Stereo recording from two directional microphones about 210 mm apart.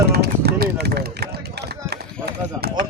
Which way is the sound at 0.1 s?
50° right (ahead or behind).